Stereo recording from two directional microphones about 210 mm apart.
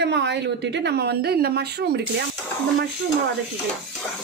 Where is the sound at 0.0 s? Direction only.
55° right (ahead or behind).